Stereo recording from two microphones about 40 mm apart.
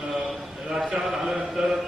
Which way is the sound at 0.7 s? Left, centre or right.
Centre.